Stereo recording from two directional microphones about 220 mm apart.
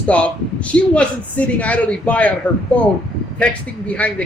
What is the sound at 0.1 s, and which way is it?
A woman's voice, 5° left (ahead or behind).